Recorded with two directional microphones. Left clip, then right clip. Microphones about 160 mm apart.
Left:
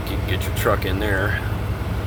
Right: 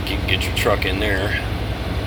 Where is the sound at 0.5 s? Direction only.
30° left (ahead or behind).